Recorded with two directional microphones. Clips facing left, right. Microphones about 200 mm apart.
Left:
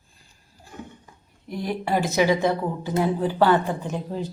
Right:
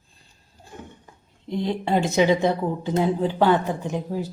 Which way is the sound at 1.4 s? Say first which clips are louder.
Right 3 dB; 20° right (ahead or behind).